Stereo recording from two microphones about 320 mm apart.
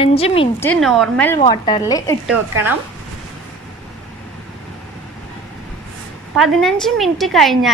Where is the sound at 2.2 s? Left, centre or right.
Centre.